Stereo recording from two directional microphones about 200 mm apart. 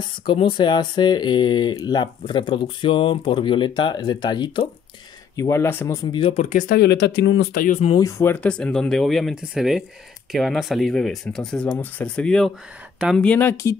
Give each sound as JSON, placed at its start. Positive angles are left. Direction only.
{"t": 0.3, "sound": "speech", "side_deg": 25}
{"t": 6.1, "sound": "speech", "side_deg": 30}
{"t": 6.8, "sound": "speech", "side_deg": 55}
{"t": 8.0, "sound": "speech", "side_deg": 10}